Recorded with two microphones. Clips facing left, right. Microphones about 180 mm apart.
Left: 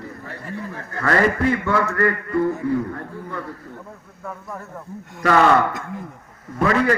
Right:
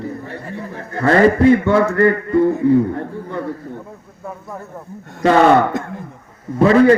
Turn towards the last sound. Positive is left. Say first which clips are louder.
# right 8 dB
turn(degrees=-30)  # may be behind; listen again after turning